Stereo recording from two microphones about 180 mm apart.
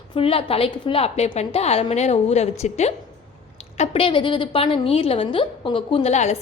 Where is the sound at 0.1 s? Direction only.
30° left (ahead or behind).